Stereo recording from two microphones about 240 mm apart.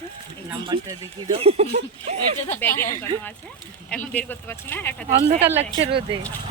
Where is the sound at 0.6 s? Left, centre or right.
Centre.